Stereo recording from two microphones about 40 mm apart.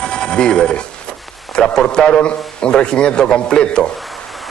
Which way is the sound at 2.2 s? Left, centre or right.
Left.